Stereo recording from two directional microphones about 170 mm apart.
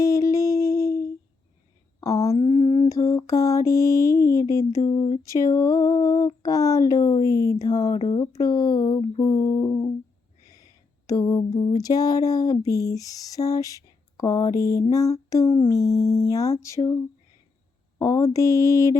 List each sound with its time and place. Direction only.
0.0 s humming: 20° left (ahead or behind)
2.0 s a sound: 20° left (ahead or behind)
2.3 s mantra: 30° left (ahead or behind)
7.3 s speech: 60° left (ahead or behind)
7.6 s mantra: 20° left (ahead or behind)
10.5 s a sound: 20° left (ahead or behind)
15.3 s music: 20° left (ahead or behind)
15.7 s mantra: 20° left (ahead or behind)
18.0 s mantra: 20° left (ahead or behind)